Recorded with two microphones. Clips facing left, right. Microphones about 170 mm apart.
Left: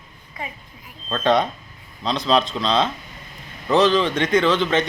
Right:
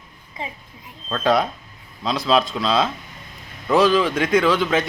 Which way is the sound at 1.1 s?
5° right (ahead or behind).